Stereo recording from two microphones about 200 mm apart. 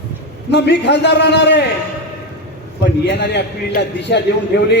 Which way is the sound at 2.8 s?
55° left (ahead or behind).